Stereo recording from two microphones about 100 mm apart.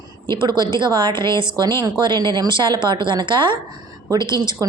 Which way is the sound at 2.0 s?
50° right (ahead or behind).